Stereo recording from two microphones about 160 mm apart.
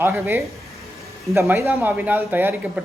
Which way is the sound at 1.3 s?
15° right (ahead or behind).